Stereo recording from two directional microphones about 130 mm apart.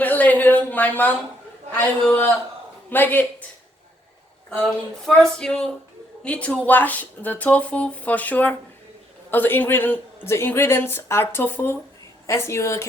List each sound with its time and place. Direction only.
0.0 s a sound: 10° left (ahead or behind)
2.0 s a woman's voice: 15° left (ahead or behind)
4.6 s a woman's voice: 5° left (ahead or behind); by 12.9 s 20° left (ahead or behind)